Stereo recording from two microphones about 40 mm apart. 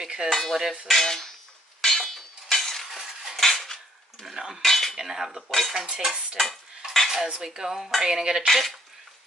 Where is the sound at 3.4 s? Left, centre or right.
Centre.